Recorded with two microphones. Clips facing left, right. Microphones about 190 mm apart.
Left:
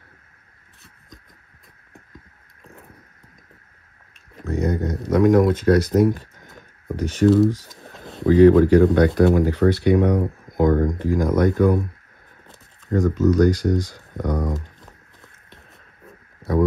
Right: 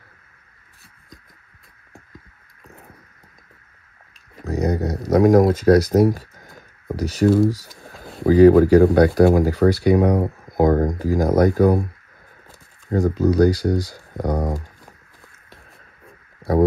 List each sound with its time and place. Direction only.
4.5 s a sound: 35° right (ahead or behind)
5.1 s speech: 40° right (ahead or behind)
8.3 s speech: 40° right (ahead or behind)
12.9 s speech: 35° right (ahead or behind)
13.7 s speech: 10° right (ahead or behind)
14.1 s speech: 35° right (ahead or behind)
16.4 s a sound: centre (ahead or behind)